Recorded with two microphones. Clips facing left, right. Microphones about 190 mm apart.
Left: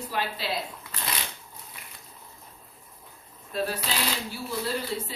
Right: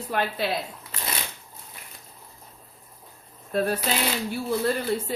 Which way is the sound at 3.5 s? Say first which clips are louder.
Right 5 dB; 55° right (ahead or behind).